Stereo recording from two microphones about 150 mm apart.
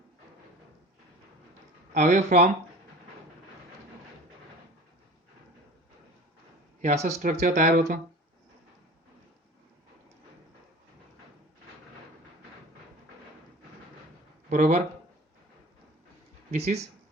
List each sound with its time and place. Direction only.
1.9 s speech: 50° right (ahead or behind)
6.8 s speech: 45° right (ahead or behind)
14.5 s speech: 55° right (ahead or behind)
16.5 s speech: 45° right (ahead or behind)